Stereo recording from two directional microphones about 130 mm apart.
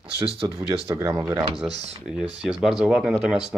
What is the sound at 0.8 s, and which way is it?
Speech, 25° right (ahead or behind).